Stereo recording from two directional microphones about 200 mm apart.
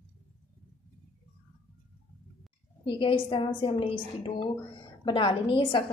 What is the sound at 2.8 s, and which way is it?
A woman's voice, 25° left (ahead or behind).